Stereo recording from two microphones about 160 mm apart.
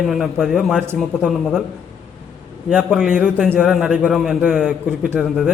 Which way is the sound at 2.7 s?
5° right (ahead or behind).